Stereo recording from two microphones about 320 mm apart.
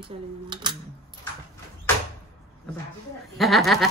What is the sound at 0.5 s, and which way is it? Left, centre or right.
Speech, centre.